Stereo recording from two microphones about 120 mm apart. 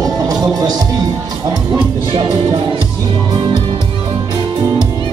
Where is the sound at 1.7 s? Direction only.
45° right (ahead or behind).